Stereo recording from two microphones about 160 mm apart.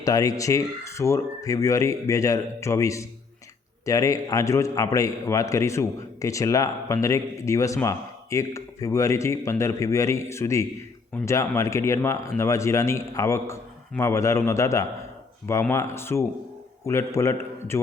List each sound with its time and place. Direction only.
0.0 s a man's voice: 20° left (ahead or behind)